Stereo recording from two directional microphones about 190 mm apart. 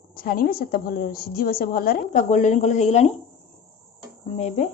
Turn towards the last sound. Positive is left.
turn(degrees=35)  # may be behind; listen again after turning